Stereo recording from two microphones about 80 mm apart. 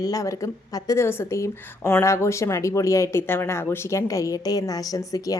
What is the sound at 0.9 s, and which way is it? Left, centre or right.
A woman's voice, left.